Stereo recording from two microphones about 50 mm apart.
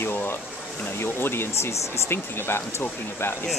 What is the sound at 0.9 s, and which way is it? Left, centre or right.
Speech, left.